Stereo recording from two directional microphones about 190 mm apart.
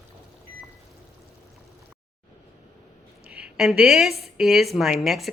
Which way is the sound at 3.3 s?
5° right (ahead or behind).